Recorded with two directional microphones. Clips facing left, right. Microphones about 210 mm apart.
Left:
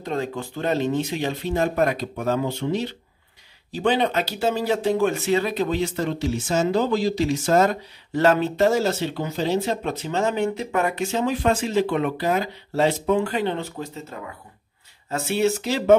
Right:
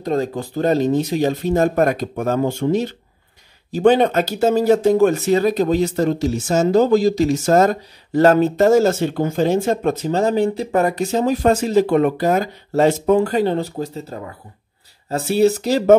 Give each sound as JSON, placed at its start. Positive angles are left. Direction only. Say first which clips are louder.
{"t": 0.0, "sound": "speech", "louder": "right 6 dB", "side_deg": -40}